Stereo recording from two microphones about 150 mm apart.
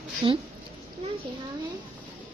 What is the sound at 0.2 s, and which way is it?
Speech, 40° right (ahead or behind).